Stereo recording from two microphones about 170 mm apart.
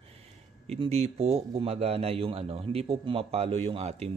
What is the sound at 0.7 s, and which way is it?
A man's voice, 35° right (ahead or behind).